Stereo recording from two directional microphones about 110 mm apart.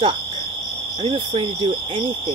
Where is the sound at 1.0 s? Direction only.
50° right (ahead or behind).